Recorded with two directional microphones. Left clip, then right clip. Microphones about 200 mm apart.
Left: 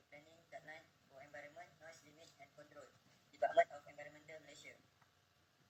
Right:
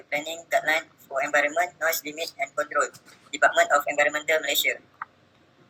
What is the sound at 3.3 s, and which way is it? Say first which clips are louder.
Speech: right 16 dB; 45° right (ahead or behind).